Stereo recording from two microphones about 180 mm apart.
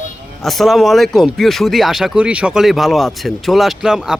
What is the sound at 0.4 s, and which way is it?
Speech, centre (ahead or behind).